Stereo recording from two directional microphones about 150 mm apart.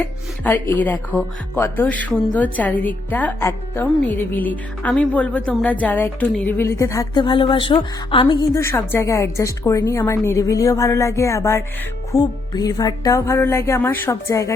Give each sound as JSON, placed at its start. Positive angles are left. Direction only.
{"t": 0.0, "sound": "a woman's voice", "side_deg": 10}